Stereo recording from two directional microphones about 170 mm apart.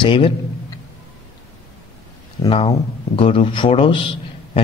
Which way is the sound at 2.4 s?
35° left (ahead or behind).